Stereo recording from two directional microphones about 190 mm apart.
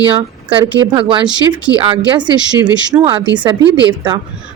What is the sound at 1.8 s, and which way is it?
A woman's voice, 25° right (ahead or behind).